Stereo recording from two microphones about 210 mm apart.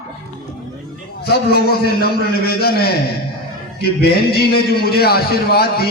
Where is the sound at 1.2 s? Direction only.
50° left (ahead or behind).